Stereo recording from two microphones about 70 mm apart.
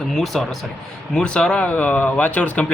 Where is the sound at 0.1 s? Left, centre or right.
Centre.